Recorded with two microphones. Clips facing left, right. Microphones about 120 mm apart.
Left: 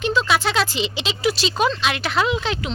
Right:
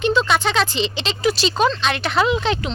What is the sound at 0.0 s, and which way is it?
Speech, centre (ahead or behind).